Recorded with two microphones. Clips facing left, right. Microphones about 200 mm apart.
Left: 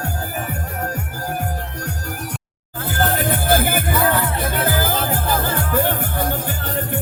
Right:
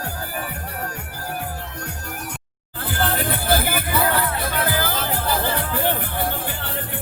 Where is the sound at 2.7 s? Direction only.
45° left (ahead or behind).